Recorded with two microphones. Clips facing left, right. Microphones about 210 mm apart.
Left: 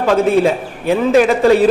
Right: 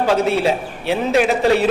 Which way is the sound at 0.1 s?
50° left (ahead or behind).